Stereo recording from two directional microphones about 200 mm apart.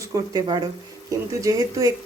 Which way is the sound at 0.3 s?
20° right (ahead or behind).